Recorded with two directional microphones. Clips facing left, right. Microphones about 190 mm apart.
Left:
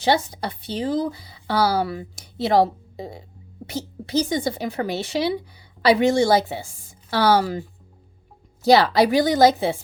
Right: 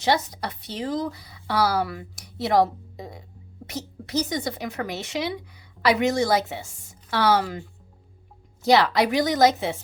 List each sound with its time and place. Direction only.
0.0 s speech: 30° left (ahead or behind)
8.6 s speech: 35° left (ahead or behind)